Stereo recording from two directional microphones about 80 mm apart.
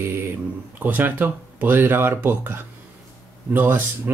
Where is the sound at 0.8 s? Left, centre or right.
Right.